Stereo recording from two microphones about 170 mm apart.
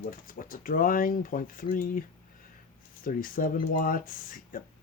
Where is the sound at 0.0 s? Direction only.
55° left (ahead or behind).